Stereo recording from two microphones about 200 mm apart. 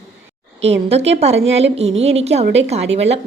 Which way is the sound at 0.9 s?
30° right (ahead or behind).